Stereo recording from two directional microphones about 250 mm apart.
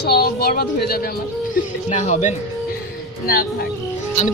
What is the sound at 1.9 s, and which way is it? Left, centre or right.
Speech, left.